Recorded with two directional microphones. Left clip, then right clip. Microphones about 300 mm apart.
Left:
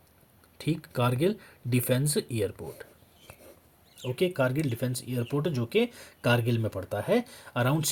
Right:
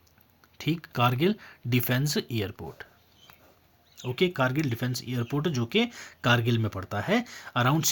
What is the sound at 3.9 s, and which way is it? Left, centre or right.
Speech, right.